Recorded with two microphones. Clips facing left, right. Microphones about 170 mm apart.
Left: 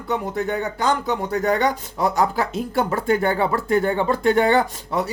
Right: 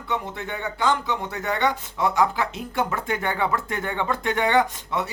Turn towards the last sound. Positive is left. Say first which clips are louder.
# left 1 dB
turn(degrees=35)  # may be behind; listen again after turning